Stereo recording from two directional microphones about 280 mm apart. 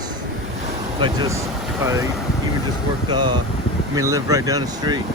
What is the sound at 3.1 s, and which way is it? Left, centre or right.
Speech, centre.